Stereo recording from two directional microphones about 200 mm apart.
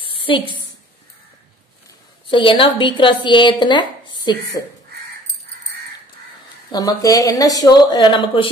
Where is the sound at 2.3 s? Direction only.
25° left (ahead or behind).